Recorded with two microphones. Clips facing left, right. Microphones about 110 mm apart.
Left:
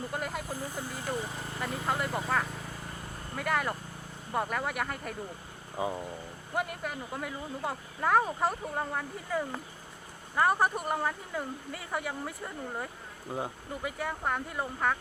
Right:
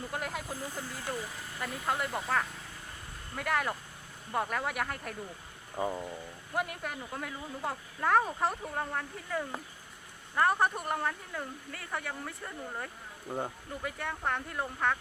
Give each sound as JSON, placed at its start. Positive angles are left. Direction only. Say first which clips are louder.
{"t": 0.1, "sound": "speech", "louder": "left 2 dB", "side_deg": 0}
{"t": 0.7, "sound": "speech", "louder": "left 3 dB", "side_deg": 15}
{"t": 1.9, "sound": "speech", "louder": "left 1 dB", "side_deg": 0}
{"t": 13.3, "sound": "speech", "louder": "left 1 dB", "side_deg": 5}